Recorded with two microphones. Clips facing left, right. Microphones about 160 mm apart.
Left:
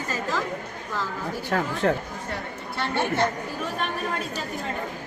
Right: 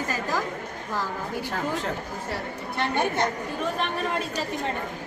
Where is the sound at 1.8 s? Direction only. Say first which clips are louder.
Left 8 dB; 65° left (ahead or behind).